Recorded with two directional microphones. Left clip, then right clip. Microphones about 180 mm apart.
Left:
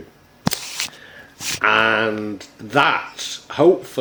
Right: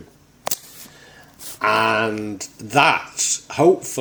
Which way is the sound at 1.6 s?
35° right (ahead or behind).